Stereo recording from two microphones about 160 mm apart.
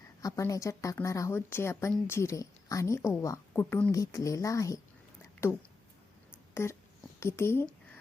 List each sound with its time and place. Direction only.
0.2 s a woman's voice: 20° left (ahead or behind)
6.5 s a sound: 15° left (ahead or behind)
7.2 s a woman's voice: 15° left (ahead or behind)